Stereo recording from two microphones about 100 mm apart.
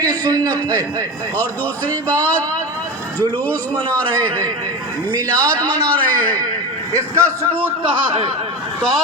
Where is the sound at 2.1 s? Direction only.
15° left (ahead or behind).